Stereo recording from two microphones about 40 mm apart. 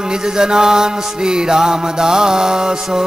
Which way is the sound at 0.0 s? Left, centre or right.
Centre.